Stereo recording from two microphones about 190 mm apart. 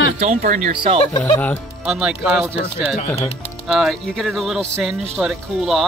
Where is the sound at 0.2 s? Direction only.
40° right (ahead or behind).